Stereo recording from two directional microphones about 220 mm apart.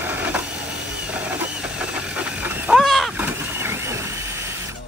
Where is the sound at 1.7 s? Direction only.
5° right (ahead or behind).